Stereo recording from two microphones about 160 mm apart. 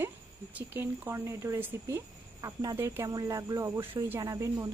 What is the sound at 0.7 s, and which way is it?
Speech, 15° right (ahead or behind).